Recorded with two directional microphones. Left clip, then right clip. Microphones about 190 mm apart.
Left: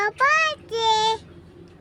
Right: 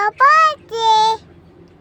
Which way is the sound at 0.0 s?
10° left (ahead or behind).